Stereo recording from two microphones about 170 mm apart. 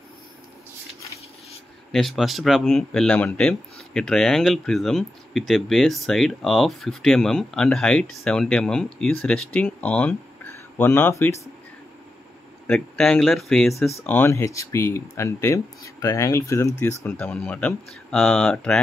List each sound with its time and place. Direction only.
1.9 s speech: centre (ahead or behind)
12.6 s speech: 5° left (ahead or behind)
14.0 s speech: 15° left (ahead or behind)